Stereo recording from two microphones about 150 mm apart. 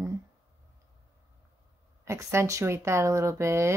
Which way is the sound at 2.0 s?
20° right (ahead or behind).